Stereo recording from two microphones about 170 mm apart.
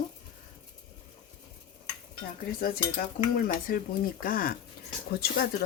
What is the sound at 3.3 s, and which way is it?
Speech, 60° left (ahead or behind).